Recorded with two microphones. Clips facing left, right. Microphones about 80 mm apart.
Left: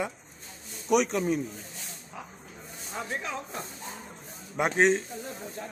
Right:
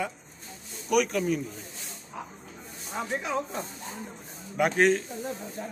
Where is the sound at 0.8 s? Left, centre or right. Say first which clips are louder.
Even; left.